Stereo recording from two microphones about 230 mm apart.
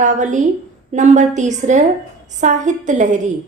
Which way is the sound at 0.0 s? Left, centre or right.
Right.